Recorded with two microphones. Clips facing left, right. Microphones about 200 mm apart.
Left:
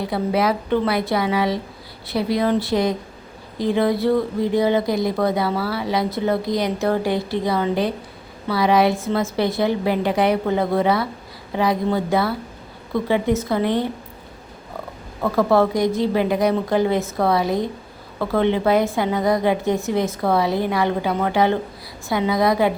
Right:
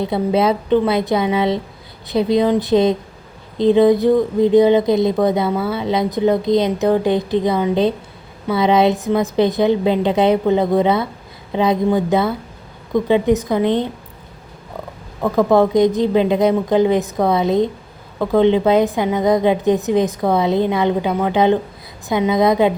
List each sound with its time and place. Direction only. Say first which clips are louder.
0.0 s speech: right 4 dB; 25° right (ahead or behind)
15.2 s speech: right 3 dB; 15° right (ahead or behind)